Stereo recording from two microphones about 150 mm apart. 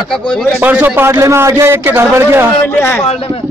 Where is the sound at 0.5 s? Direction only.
10° right (ahead or behind).